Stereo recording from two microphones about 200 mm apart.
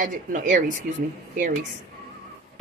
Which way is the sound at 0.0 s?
40° right (ahead or behind).